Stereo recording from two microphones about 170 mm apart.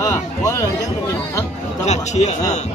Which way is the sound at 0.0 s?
20° left (ahead or behind).